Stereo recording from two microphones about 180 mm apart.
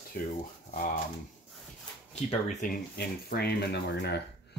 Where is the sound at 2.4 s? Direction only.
50° left (ahead or behind); by 4.2 s 65° left (ahead or behind).